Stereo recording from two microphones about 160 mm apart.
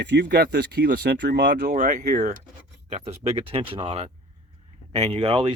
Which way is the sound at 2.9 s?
40° right (ahead or behind).